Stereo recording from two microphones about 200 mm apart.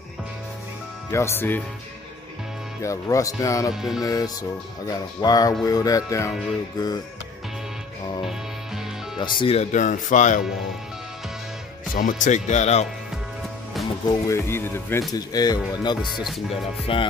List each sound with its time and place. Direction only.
1.1 s speech: 10° left (ahead or behind)
2.8 s speech: 15° left (ahead or behind)
3.7 s music: centre (ahead or behind)
4.0 s music: 20° left (ahead or behind)
5.6 s speech: 20° left (ahead or behind)
8.3 s music: centre (ahead or behind)
9.2 s speech: 25° left (ahead or behind)
11.9 s speech: 40° left (ahead or behind)
14.0 s speech: 15° left (ahead or behind)
15.1 s music: 20° left (ahead or behind)
16.2 s music: centre (ahead or behind)
16.8 s music: 25° left (ahead or behind)